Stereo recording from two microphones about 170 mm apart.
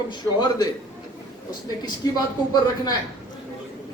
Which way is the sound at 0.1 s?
25° left (ahead or behind).